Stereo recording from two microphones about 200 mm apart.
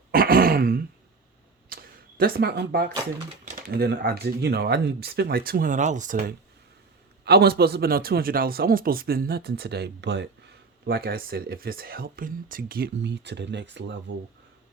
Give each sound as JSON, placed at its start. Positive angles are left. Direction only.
{"t": 0.1, "sound": "throat clearing", "side_deg": -45}
{"t": 1.7, "sound": "camera", "side_deg": -45}
{"t": 3.4, "sound": "speech", "side_deg": -45}
{"t": 7.3, "sound": "speech", "side_deg": -55}